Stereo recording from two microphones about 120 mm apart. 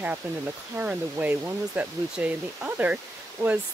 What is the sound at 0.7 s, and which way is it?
Speech, 15° right (ahead or behind).